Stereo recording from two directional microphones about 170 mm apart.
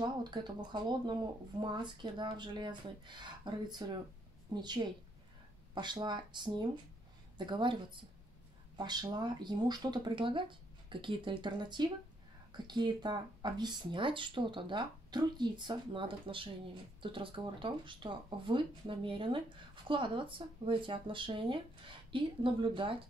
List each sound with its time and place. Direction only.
0.0 s speech: 25° right (ahead or behind)